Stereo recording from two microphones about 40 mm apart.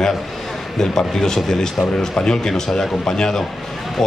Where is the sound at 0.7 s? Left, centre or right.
Centre.